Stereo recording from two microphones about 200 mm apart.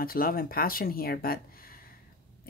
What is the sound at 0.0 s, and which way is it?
Speech, 45° left (ahead or behind).